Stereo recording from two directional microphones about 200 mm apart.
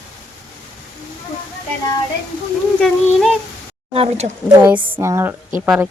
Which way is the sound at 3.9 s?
30° right (ahead or behind).